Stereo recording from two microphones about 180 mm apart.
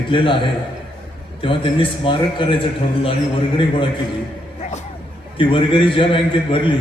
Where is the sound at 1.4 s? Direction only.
30° left (ahead or behind).